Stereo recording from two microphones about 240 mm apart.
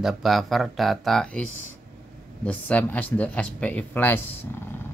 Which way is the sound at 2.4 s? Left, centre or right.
Centre.